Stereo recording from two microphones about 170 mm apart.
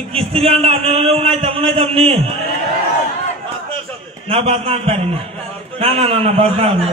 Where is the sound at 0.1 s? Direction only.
35° right (ahead or behind).